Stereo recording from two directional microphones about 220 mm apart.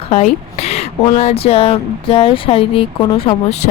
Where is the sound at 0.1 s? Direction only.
30° left (ahead or behind).